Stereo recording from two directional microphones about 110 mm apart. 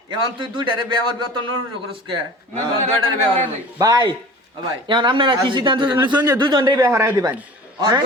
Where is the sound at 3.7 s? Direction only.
30° right (ahead or behind).